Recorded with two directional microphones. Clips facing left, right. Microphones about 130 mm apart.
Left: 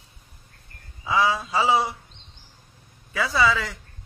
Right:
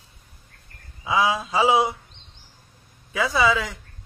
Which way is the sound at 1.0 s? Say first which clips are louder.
Right 1 dB; 15° right (ahead or behind).